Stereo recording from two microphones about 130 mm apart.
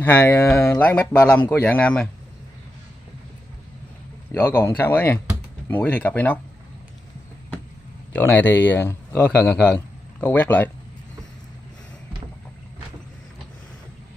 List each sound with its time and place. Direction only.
0.0 s speech: 10° left (ahead or behind)
4.3 s speech: 15° left (ahead or behind)
8.1 s speech: 15° left (ahead or behind)